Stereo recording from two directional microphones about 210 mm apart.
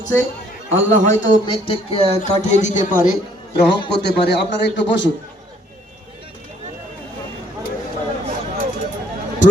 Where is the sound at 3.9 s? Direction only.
55° left (ahead or behind).